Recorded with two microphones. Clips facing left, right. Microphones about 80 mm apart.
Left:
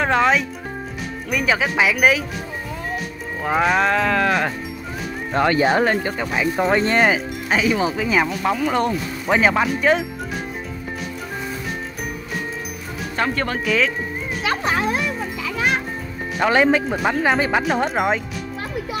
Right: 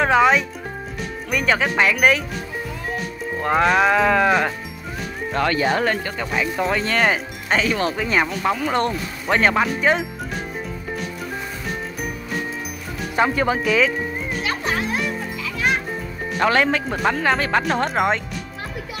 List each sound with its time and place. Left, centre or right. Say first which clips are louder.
0.0 s speech: right 2 dB; centre
3.4 s speech: right 1 dB; centre
5.3 s speech: left 3 dB; left
6.7 s speech: left 4 dB; left
7.0 s speech: left 2 dB; centre
13.1 s speech: right 4 dB; centre
16.3 s speech: left 2 dB; centre